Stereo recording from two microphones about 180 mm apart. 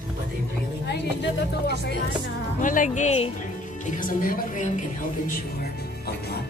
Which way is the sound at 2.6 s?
45° left (ahead or behind).